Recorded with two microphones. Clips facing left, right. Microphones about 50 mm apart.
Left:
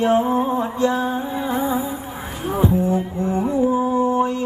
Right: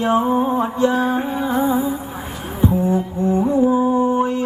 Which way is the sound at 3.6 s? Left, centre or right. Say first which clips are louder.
Even; right.